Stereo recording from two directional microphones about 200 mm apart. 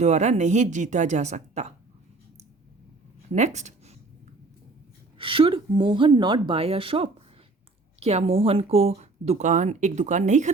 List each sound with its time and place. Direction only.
0.0 s speech: 35° right (ahead or behind)
3.3 s speech: 35° right (ahead or behind)
5.1 s a woman's voice: 25° right (ahead or behind)